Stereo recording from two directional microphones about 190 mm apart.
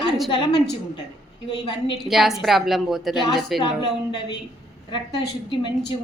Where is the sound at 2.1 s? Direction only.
Centre (ahead or behind).